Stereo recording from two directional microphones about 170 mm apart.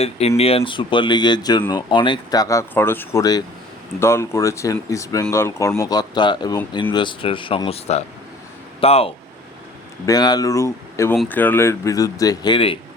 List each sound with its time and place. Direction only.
0.0 s speech: 35° left (ahead or behind)
10.1 s speech: 25° left (ahead or behind)